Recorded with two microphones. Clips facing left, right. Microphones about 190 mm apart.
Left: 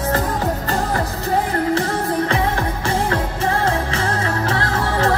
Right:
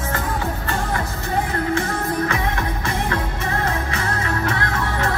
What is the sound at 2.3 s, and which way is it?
Music, 30° left (ahead or behind).